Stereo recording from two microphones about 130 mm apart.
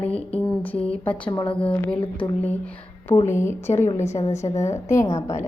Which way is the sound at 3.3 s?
20° left (ahead or behind).